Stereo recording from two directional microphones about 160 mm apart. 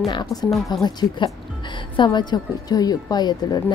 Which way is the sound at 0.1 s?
25° left (ahead or behind).